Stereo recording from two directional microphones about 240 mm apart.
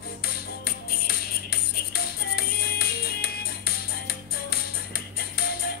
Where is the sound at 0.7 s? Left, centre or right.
Left.